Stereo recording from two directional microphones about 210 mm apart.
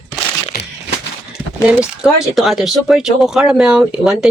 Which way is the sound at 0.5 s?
50° left (ahead or behind).